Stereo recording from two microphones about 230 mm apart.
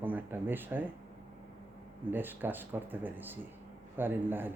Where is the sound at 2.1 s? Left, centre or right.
Centre.